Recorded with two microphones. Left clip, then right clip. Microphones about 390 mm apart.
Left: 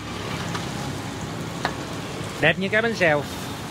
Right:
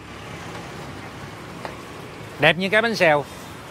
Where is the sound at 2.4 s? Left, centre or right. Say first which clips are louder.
Right 3 dB; right.